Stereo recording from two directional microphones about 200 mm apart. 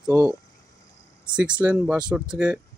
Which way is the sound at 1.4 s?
5° right (ahead or behind).